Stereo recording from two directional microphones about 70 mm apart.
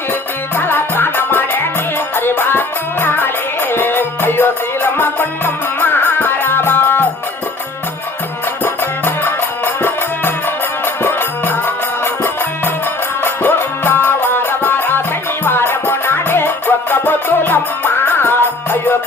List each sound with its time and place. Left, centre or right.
0.5 s music: left
8.6 s music: left